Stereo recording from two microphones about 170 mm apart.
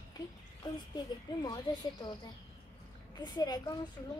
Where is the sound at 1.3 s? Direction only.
25° left (ahead or behind).